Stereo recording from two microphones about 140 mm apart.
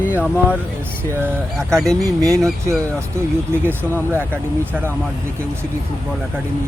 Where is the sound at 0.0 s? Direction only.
10° right (ahead or behind).